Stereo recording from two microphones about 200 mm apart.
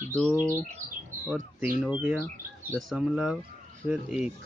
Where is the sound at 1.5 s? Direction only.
5° right (ahead or behind).